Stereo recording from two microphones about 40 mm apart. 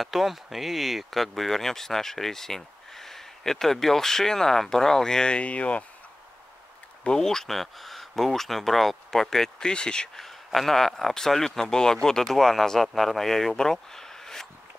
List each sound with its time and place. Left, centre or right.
0.0 s speech: centre
5.4 s speech: left
7.1 s speech: centre
9.6 s speech: left
10.1 s speech: centre